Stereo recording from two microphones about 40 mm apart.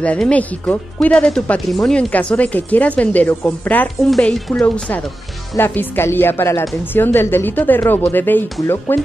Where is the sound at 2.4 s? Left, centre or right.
Left.